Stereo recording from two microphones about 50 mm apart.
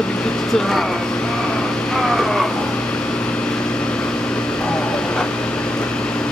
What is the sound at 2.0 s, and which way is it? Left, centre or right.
Vehicle, centre.